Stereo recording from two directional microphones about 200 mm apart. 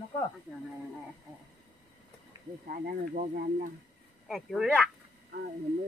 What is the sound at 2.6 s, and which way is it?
Speech, 40° right (ahead or behind).